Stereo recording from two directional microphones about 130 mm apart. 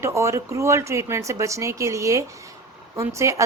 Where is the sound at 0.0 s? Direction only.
20° right (ahead or behind).